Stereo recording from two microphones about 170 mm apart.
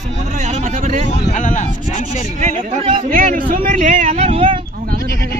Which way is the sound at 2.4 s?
40° right (ahead or behind).